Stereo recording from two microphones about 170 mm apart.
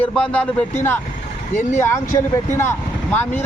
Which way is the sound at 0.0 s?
5° left (ahead or behind).